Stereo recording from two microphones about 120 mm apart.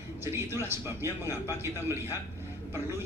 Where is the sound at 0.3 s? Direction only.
20° right (ahead or behind).